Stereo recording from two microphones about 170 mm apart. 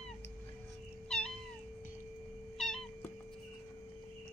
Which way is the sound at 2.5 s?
Centre (ahead or behind).